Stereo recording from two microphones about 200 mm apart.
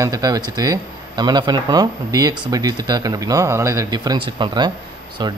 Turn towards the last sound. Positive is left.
turn(degrees=-20)  # may be behind; listen again after turning